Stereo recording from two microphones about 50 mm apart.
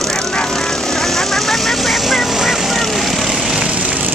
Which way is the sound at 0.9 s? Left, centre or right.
Centre.